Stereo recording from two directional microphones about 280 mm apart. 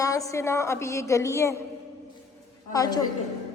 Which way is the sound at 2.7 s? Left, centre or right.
Centre.